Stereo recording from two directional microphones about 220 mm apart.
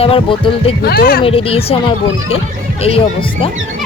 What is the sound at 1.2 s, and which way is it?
Speech, 25° left (ahead or behind).